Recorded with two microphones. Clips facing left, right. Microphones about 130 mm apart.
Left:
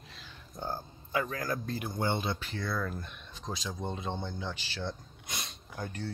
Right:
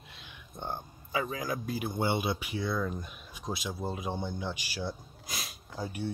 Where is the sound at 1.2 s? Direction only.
15° right (ahead or behind).